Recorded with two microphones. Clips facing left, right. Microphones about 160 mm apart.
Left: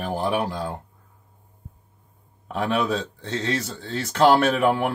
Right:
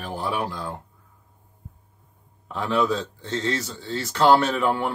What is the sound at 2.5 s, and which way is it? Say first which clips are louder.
Speech: even; 65° left (ahead or behind).